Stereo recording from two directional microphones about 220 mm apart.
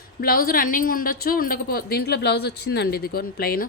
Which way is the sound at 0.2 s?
40° left (ahead or behind).